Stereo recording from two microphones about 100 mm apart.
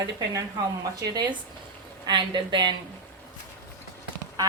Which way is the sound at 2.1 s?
50° right (ahead or behind).